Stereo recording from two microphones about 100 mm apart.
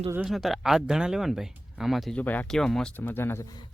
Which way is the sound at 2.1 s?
15° left (ahead or behind).